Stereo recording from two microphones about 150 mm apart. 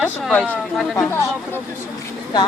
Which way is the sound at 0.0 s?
10° left (ahead or behind).